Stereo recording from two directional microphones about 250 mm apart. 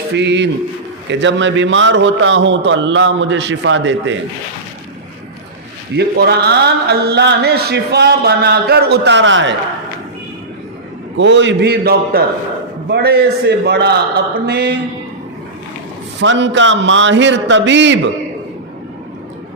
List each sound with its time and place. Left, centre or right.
0.1 s a man's voice: right
6.0 s a man's voice: right
11.2 s a man's voice: right
16.2 s a man's voice: right